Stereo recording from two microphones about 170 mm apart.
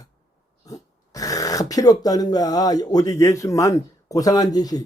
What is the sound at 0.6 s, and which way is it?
Speech, 20° left (ahead or behind).